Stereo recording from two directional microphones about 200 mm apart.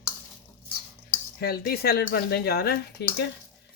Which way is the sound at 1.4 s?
50° left (ahead or behind).